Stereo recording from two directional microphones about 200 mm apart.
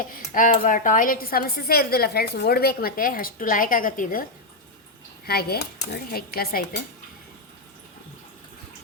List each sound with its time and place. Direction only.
0.0 s speech: 45° left (ahead or behind)